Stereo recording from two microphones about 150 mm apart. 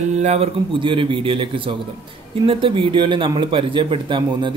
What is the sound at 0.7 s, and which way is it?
A man's voice, 35° right (ahead or behind).